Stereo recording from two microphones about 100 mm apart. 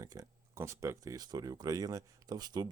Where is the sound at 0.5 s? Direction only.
30° right (ahead or behind); by 2.7 s 45° right (ahead or behind).